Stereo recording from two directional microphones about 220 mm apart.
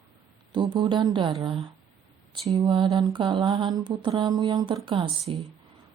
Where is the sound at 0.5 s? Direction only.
20° right (ahead or behind).